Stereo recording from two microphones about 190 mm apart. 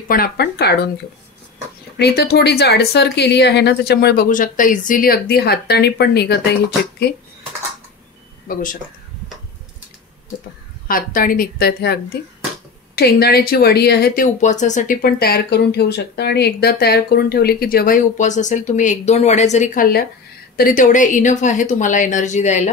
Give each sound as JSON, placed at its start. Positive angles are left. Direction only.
{"t": 0.1, "sound": "speech", "side_deg": 55}
{"t": 2.0, "sound": "speech", "side_deg": 60}
{"t": 10.9, "sound": "a woman's voice", "side_deg": 45}